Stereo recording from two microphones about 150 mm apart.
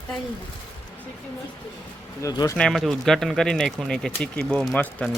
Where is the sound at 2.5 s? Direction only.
Centre (ahead or behind).